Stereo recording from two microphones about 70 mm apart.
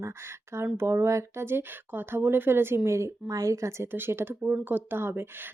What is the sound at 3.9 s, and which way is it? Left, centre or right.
Speech, right.